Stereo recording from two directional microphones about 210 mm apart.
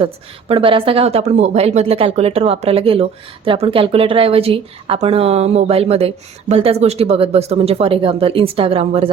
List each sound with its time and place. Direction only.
0.0 s speech: 25° right (ahead or behind)